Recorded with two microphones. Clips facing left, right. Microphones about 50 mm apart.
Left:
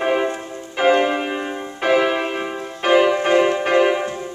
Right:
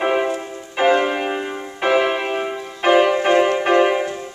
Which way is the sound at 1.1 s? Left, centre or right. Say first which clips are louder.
Right 1 dB; centre.